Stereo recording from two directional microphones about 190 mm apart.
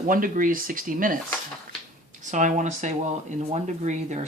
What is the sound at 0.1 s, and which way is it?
Speech, 45° right (ahead or behind).